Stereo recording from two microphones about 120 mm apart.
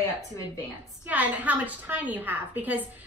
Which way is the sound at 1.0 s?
15° right (ahead or behind).